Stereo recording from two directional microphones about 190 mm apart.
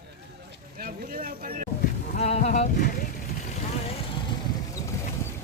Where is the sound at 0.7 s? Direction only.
50° right (ahead or behind).